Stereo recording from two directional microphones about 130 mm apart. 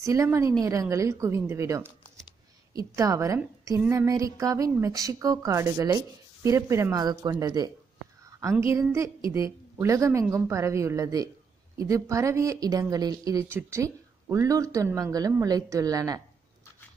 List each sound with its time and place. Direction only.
0.0 s speech: 25° right (ahead or behind)
3.0 s a woman's voice: 25° right (ahead or behind)